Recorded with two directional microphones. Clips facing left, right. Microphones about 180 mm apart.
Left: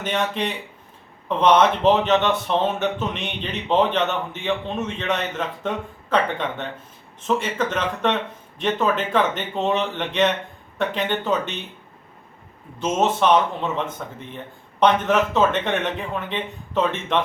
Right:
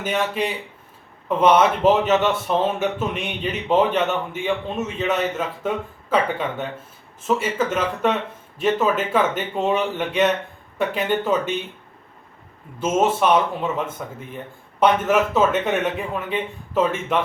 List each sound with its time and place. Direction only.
0.0 s speech: 5° right (ahead or behind)
12.8 s speech: 10° right (ahead or behind)